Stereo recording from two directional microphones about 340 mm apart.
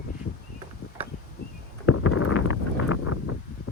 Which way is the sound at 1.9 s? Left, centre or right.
Left.